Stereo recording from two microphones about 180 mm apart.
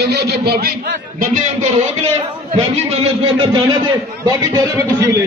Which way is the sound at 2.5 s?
30° right (ahead or behind).